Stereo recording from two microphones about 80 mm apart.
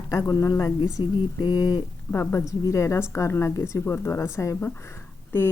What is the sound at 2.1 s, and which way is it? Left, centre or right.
A woman's voice, left.